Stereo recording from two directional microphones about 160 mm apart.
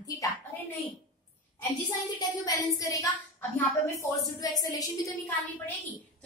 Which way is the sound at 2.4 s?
20° left (ahead or behind).